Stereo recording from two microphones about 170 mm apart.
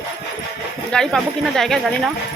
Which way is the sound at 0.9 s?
5° left (ahead or behind).